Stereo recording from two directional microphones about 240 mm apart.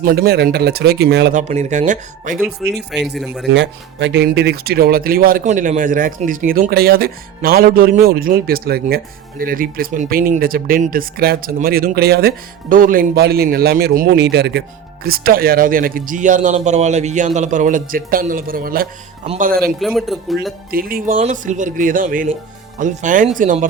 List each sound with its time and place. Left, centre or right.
0.0 s speech: right
1.4 s speech: right
2.9 s speech: centre
3.5 s speech: right
19.8 s speech: centre
20.7 s speech: right